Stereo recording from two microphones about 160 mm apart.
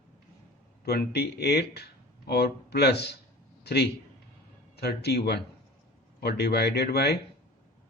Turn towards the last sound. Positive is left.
turn(degrees=90)